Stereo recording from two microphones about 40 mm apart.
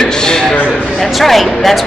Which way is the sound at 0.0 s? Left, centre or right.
Centre.